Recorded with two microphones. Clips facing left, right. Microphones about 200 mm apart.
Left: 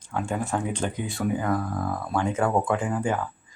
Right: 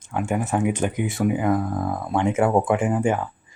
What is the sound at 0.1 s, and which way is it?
Speech, 20° right (ahead or behind).